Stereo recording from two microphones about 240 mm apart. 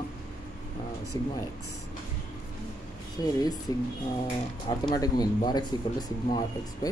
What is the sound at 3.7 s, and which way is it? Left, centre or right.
Speech, centre.